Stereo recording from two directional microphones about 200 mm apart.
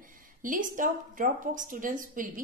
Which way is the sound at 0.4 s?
40° right (ahead or behind).